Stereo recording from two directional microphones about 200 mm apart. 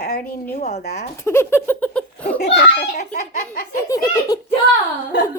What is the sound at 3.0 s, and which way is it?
Speech, 35° left (ahead or behind).